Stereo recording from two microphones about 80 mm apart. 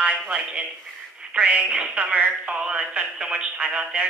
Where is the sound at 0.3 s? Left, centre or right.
Centre.